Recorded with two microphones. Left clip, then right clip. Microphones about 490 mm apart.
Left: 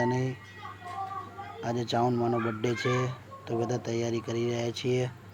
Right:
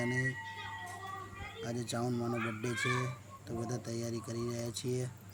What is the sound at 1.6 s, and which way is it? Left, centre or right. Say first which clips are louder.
Speech: left 10 dB; right.